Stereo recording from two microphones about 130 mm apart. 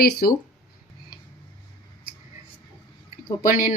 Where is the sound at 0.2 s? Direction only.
90° left.